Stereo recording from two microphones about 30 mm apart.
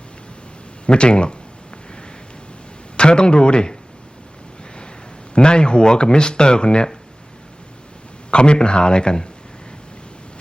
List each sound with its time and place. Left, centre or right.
0.9 s speech: left
3.0 s speech: left
5.3 s speech: left
8.3 s speech: left